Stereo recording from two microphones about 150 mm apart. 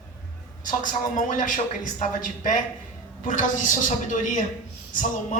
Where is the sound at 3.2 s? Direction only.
60° left (ahead or behind).